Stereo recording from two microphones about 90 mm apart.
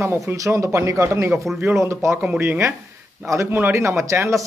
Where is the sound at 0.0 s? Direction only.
30° right (ahead or behind).